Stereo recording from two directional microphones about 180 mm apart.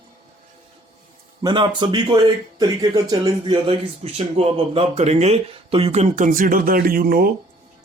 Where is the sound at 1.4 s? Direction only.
25° right (ahead or behind); by 7.3 s 55° right (ahead or behind).